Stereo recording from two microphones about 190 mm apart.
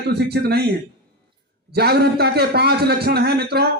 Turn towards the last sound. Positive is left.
turn(degrees=-60)  # may be behind; listen again after turning